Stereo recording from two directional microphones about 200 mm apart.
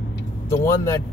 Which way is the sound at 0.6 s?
15° left (ahead or behind).